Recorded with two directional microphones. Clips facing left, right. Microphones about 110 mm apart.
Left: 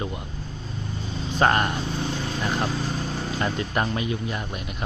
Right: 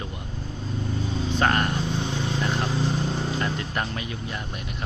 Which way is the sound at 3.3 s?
25° left (ahead or behind).